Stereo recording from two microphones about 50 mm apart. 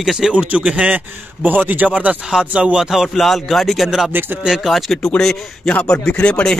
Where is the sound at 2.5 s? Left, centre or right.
Right.